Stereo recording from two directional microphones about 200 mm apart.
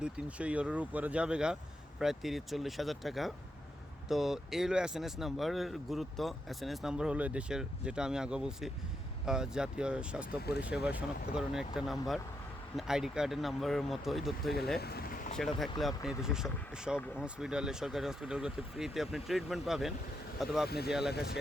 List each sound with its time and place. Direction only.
0.0 s speech: 5° right (ahead or behind)
14.8 s a sound: 50° left (ahead or behind)
15.4 s speech: centre (ahead or behind)
20.7 s speech: 55° left (ahead or behind)